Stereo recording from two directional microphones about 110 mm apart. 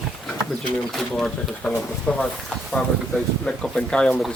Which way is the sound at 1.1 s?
5° left (ahead or behind).